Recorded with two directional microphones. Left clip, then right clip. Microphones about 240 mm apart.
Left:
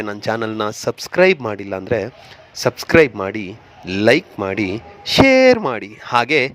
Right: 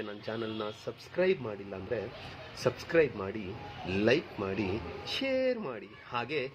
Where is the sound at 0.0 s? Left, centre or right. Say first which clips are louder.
Left 16 dB; left.